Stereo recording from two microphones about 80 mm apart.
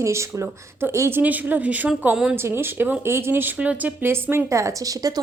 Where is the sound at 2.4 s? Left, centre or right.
Right.